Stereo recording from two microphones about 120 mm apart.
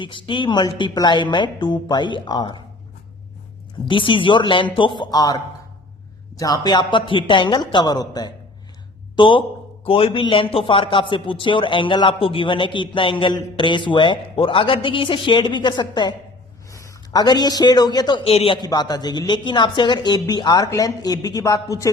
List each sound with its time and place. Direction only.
0.0 s a woman's voice: 45° left (ahead or behind)
3.8 s a man's voice: 45° left (ahead or behind)
6.4 s a woman's voice: 35° left (ahead or behind)
9.1 s a man's voice: 45° left (ahead or behind)
16.7 s a man's voice: 25° left (ahead or behind)
18.3 s a man's voice: 50° left (ahead or behind)
18.6 s a woman's voice: 35° left (ahead or behind)